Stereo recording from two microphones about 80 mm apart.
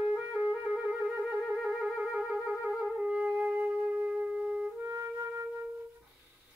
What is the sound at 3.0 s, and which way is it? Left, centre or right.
Music, centre.